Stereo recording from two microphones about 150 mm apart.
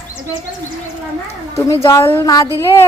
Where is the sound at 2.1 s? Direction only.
20° left (ahead or behind).